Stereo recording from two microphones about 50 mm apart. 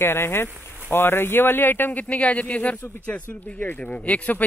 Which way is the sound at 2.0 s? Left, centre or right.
Left.